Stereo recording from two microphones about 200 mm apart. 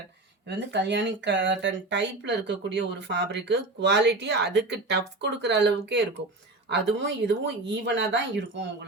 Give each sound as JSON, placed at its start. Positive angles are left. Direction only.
{"t": 0.4, "sound": "speech", "side_deg": -60}